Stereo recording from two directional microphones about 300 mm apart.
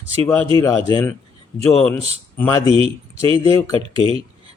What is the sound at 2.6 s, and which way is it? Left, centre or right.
Speech, centre.